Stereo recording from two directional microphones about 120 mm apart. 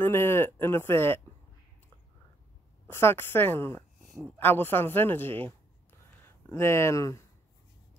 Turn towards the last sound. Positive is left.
turn(degrees=25)  # may be behind; listen again after turning